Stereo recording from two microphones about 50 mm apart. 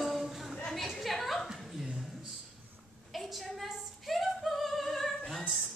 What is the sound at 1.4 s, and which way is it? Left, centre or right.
Chuckle, centre.